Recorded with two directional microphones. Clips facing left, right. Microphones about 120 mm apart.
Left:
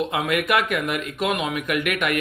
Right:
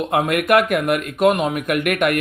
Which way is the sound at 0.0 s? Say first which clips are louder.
Right 4 dB; 45° right (ahead or behind).